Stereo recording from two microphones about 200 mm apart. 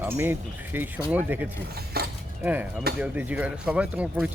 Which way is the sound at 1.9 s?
50° right (ahead or behind).